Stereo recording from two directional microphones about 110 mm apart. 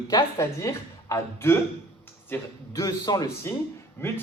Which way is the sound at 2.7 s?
35° left (ahead or behind).